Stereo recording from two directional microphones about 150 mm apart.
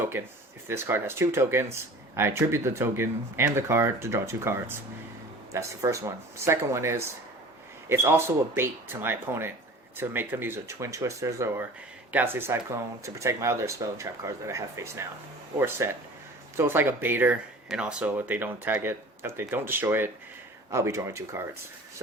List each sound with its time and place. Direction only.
0.1 s speech: 15° right (ahead or behind)